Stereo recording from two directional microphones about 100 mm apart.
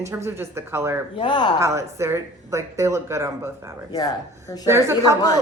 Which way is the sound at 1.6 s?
30° right (ahead or behind).